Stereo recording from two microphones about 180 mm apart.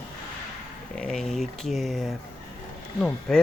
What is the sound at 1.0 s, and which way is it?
Speech, 5° left (ahead or behind).